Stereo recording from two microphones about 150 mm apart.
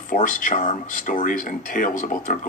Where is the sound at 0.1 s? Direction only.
60° left (ahead or behind).